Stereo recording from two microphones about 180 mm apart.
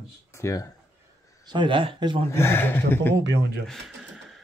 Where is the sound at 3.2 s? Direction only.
75° right (ahead or behind).